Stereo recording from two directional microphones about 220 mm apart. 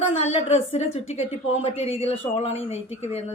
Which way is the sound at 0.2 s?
30° left (ahead or behind).